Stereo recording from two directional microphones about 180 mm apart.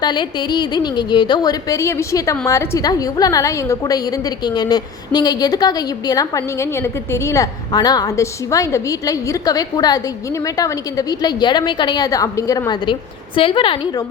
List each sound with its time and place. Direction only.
0.0 s a woman's voice: 25° left (ahead or behind)